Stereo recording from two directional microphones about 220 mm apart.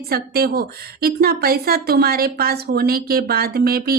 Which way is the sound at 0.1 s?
45° right (ahead or behind).